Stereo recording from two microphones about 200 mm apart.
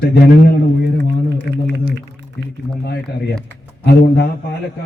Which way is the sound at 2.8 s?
55° left (ahead or behind).